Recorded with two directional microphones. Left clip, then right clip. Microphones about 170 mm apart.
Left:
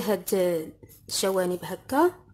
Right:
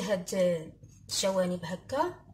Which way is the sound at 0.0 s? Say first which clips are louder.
Left 3 dB; 65° left (ahead or behind).